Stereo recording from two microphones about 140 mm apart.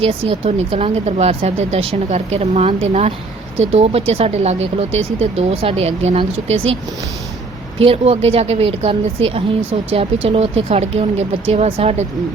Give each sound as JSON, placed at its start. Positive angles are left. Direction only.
{"t": 0.0, "sound": "a woman's voice", "side_deg": -45}
{"t": 7.8, "sound": "a woman's voice", "side_deg": -45}